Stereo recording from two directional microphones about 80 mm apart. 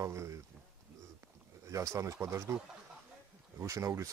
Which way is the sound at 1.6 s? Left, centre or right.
Right.